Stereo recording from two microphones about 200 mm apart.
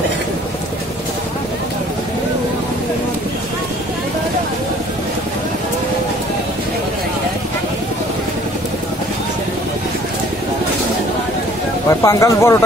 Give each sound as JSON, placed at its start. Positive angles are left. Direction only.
{"t": 11.9, "sound": "speech", "side_deg": 15}